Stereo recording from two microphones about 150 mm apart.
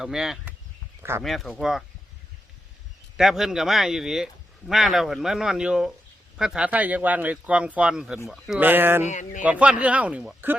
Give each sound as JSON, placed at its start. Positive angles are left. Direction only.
{"t": 0.0, "sound": "speech", "side_deg": -5}
{"t": 3.2, "sound": "a man's voice", "side_deg": -5}
{"t": 8.6, "sound": "a man's voice", "side_deg": -15}
{"t": 9.0, "sound": "speech", "side_deg": 55}
{"t": 9.4, "sound": "a man's voice", "side_deg": -10}